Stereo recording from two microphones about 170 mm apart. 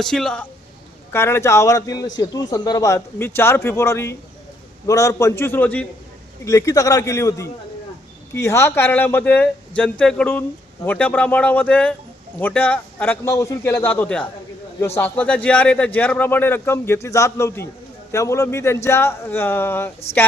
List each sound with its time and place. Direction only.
0.0 s speech: centre (ahead or behind)
1.1 s a man's voice: 15° left (ahead or behind)